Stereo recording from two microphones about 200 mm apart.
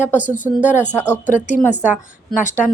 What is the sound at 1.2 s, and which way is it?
Speech, 40° left (ahead or behind).